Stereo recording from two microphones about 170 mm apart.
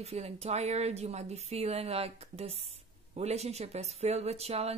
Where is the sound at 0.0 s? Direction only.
35° right (ahead or behind).